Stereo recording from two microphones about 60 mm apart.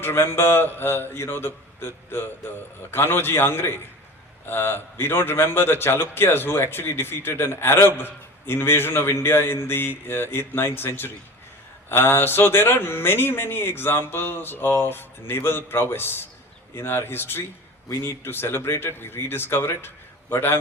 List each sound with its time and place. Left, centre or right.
0.0 s a man's voice: left